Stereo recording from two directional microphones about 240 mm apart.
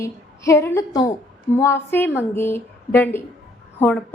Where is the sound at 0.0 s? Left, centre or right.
Centre.